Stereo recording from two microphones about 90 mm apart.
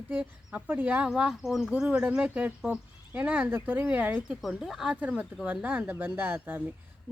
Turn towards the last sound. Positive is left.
turn(degrees=-20)  # may be behind; listen again after turning